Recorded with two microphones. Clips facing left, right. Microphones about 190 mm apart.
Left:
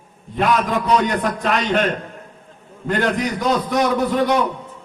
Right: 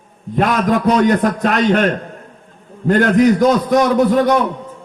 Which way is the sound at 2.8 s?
45° right (ahead or behind).